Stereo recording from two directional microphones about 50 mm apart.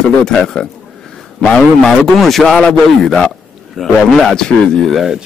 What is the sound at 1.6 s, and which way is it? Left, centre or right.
A man's voice, centre.